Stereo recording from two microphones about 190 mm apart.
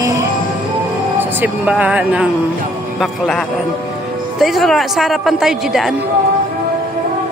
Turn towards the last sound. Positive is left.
turn(degrees=0)  # may be behind; listen again after turning